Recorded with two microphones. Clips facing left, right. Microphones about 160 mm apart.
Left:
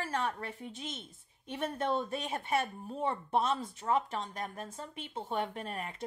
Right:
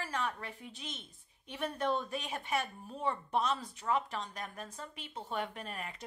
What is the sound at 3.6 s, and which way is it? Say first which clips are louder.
Speech: left 2 dB; 45° left (ahead or behind).